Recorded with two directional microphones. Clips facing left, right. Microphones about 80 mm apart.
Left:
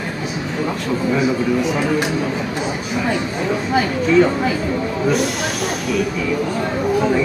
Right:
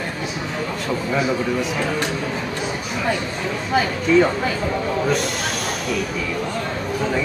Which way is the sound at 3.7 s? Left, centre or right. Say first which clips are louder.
Even; centre.